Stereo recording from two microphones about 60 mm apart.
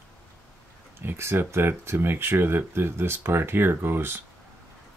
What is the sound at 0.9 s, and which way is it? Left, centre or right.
Speech, right.